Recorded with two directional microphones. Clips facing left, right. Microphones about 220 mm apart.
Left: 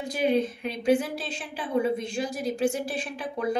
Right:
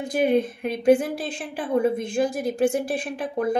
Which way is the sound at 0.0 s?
55° right (ahead or behind).